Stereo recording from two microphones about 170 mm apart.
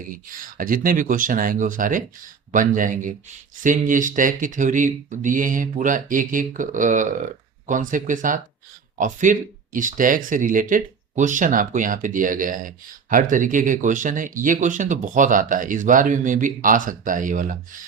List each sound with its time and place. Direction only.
0.1 s speech: 55° right (ahead or behind)